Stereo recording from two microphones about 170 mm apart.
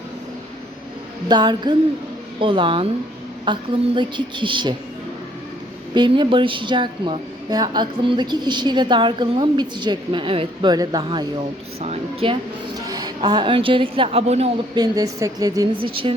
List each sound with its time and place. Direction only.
1.3 s a woman's voice: 25° right (ahead or behind)
5.9 s speech: 25° right (ahead or behind)
11.8 s a woman's voice: 35° right (ahead or behind)
12.8 s speech: 25° right (ahead or behind); by 14.5 s 40° right (ahead or behind)
14.8 s speech: 20° right (ahead or behind)